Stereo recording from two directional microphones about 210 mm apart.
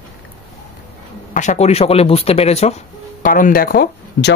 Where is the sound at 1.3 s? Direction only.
35° left (ahead or behind).